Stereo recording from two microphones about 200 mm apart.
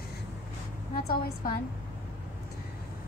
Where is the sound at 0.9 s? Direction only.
50° left (ahead or behind).